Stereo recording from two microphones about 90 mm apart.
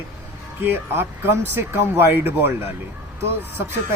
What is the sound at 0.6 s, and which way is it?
Speech, 25° right (ahead or behind).